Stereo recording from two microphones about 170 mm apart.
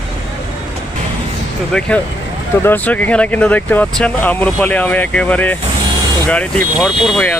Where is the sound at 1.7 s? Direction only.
5° left (ahead or behind).